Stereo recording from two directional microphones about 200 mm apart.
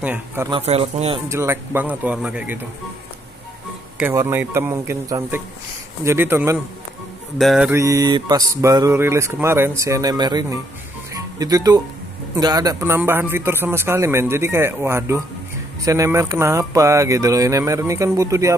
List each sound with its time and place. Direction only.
0.0 s speech: 10° right (ahead or behind)
0.5 s speech: 30° right (ahead or behind)
1.3 s speech: 15° right (ahead or behind)
4.0 s speech: 15° right (ahead or behind)
7.3 s mantra: centre (ahead or behind)
7.7 s speech: 15° right (ahead or behind)